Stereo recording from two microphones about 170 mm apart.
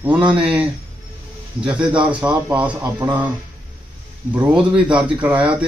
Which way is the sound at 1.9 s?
30° right (ahead or behind).